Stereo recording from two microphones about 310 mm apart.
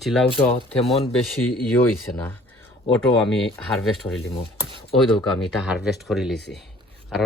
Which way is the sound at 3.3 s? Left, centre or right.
Centre.